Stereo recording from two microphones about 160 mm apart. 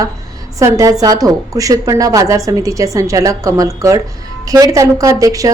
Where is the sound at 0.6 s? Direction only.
20° right (ahead or behind).